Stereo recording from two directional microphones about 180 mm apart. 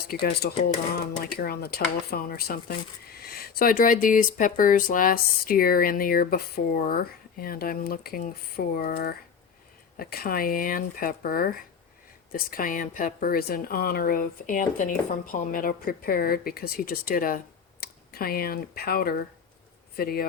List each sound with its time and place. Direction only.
0.1 s speech: 65° left (ahead or behind)